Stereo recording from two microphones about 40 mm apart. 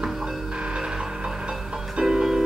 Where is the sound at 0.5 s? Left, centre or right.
Right.